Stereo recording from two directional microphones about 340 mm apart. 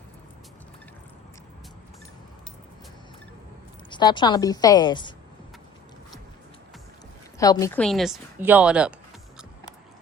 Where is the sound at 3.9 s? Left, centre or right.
Centre.